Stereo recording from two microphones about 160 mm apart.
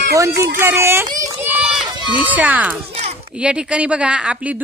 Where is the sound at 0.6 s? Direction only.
15° right (ahead or behind).